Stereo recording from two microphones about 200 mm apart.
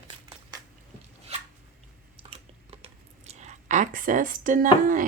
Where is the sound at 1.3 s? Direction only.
30° right (ahead or behind).